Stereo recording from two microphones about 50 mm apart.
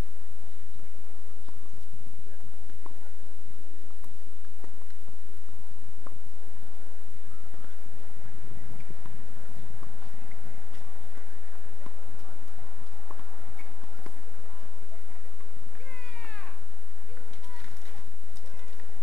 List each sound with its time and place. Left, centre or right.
13.1 s clip-clop: centre
15.8 s cat: centre
17.1 s a sound: centre